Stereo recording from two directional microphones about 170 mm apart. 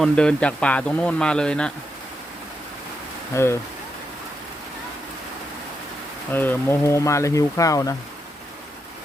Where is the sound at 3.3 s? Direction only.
15° left (ahead or behind).